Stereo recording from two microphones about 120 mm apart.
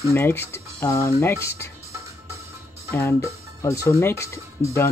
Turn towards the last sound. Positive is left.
turn(degrees=20)  # may be behind; listen again after turning